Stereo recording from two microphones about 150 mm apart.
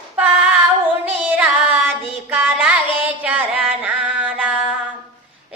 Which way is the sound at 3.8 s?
10° right (ahead or behind).